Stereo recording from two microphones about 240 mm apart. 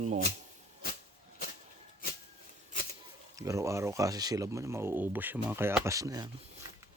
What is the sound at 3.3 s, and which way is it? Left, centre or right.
Speech, centre.